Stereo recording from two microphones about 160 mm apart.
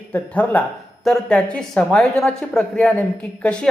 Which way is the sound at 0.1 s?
10° left (ahead or behind).